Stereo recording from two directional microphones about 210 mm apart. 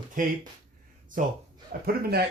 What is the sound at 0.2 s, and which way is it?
Speech, 40° right (ahead or behind).